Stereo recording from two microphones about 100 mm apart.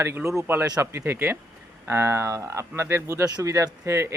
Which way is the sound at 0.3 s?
25° right (ahead or behind).